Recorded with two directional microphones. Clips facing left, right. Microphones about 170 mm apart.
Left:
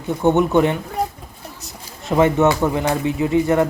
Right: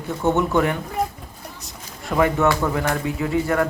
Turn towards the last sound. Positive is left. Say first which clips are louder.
# left 4 dB
turn(degrees=20)  # may be behind; listen again after turning